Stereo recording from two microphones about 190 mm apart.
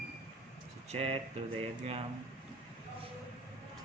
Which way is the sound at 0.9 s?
30° right (ahead or behind).